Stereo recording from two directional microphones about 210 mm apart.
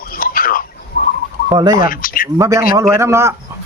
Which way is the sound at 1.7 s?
40° left (ahead or behind).